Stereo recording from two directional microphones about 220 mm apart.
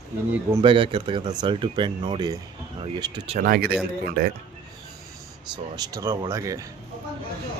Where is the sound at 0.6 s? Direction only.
25° right (ahead or behind).